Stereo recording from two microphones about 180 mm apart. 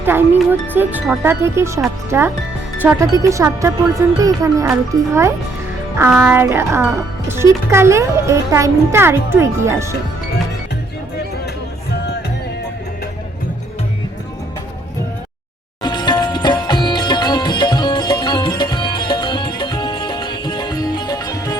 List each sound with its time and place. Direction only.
0.0 s a child's voice: 10° right (ahead or behind)
15.8 s sitar: 25° left (ahead or behind)